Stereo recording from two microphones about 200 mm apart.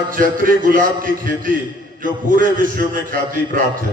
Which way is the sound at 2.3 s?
45° right (ahead or behind).